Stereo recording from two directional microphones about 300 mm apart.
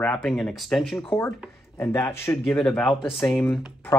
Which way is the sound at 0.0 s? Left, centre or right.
Centre.